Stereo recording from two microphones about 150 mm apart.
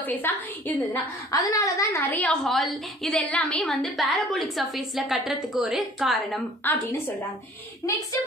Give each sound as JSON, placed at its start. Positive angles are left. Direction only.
{"t": 0.0, "sound": "a woman's voice", "side_deg": 10}
{"t": 1.3, "sound": "a woman's voice", "side_deg": 20}
{"t": 6.6, "sound": "a woman's voice", "side_deg": 15}